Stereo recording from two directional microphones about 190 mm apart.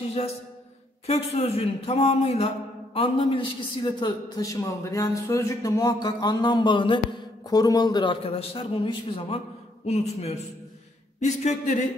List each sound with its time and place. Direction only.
1.0 s a man's voice: 35° left (ahead or behind)